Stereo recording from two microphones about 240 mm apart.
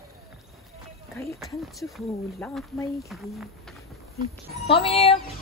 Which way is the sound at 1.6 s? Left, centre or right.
Centre.